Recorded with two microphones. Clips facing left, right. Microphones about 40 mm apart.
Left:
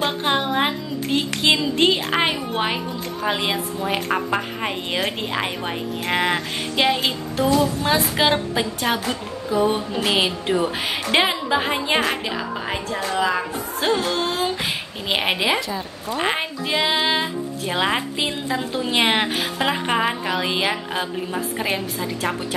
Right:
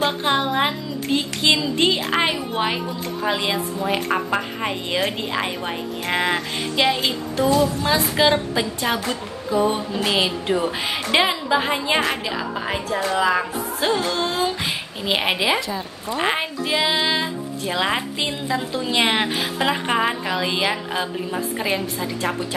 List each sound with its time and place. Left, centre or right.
0.0 s a woman's voice: centre
13.7 s a woman's voice: centre
18.7 s a woman's voice: centre